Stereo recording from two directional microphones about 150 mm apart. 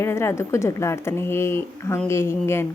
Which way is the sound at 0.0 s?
15° left (ahead or behind).